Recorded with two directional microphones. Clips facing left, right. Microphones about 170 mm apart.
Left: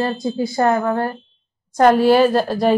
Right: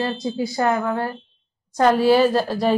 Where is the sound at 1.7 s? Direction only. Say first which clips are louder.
Left 3 dB; 55° left (ahead or behind).